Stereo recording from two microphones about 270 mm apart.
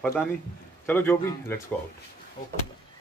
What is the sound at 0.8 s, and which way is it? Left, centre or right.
Speech, centre.